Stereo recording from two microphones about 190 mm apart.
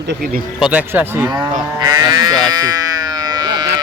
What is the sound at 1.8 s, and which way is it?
Sheep, 20° right (ahead or behind).